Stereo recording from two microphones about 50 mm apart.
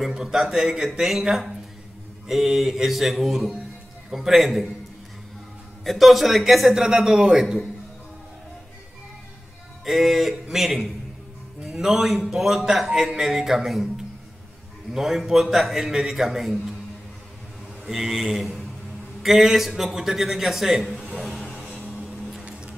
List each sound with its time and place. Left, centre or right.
0.1 s a man's voice: centre
5.9 s a man's voice: centre
9.8 s a man's voice: centre
17.8 s a man's voice: centre
20.8 s a man's voice: centre